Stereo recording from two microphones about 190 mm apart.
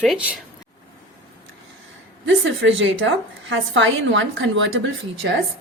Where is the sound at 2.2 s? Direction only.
75° right (ahead or behind).